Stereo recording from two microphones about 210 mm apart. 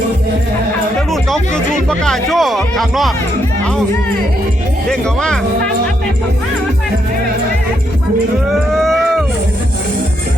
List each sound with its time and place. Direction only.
1.9 s speech: centre (ahead or behind)
4.9 s speech: 5° left (ahead or behind)
8.7 s a sound: centre (ahead or behind)